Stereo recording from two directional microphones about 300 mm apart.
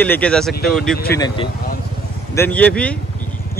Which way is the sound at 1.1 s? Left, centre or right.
Centre.